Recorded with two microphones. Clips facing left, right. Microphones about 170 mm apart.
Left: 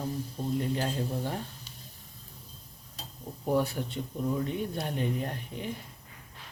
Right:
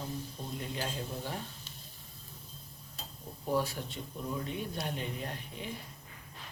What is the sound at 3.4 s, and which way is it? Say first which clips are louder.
Speech: left 4 dB; 55° left (ahead or behind).